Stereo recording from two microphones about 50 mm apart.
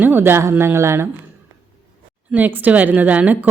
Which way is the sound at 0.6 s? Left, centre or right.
Right.